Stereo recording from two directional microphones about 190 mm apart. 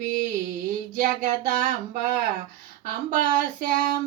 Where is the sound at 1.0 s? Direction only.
45° right (ahead or behind).